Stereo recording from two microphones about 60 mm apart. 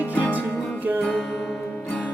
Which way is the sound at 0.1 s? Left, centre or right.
Left.